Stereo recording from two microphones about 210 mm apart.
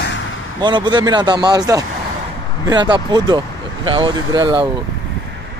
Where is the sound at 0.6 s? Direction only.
20° right (ahead or behind).